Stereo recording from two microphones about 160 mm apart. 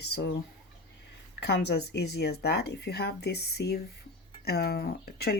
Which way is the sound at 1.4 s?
90° left.